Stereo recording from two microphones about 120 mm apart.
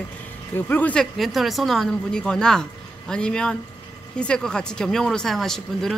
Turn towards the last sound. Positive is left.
turn(degrees=5)  # may be behind; listen again after turning